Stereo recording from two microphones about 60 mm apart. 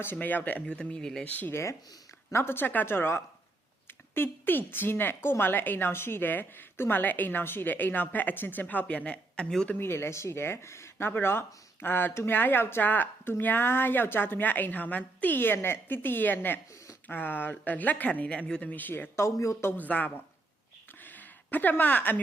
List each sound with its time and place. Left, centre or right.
0.0 s speech: left; by 1.2 s centre
1.2 s speech: left
2.3 s a woman's voice: left; by 9.6 s centre
9.6 s a woman's voice: left; by 18.7 s centre
18.7 s speech: left
19.1 s speech: left
19.7 s speech: left
21.0 s a sound: left